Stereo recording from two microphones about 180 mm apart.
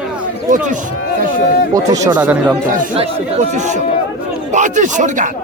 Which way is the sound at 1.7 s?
20° right (ahead or behind).